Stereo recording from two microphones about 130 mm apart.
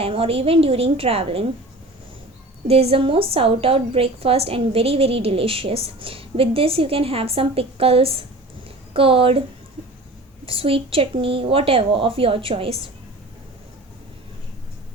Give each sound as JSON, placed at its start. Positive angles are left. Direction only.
{"t": 0.0, "sound": "a woman's voice", "side_deg": -45}
{"t": 2.6, "sound": "a woman's voice", "side_deg": -50}
{"t": 10.4, "sound": "a woman's voice", "side_deg": -45}